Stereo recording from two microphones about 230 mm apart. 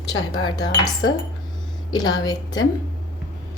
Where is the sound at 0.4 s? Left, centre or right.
Centre.